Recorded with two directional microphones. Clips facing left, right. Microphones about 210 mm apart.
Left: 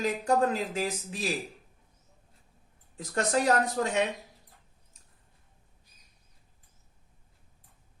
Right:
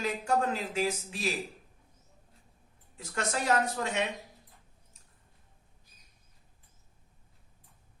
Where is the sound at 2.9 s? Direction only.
40° left (ahead or behind).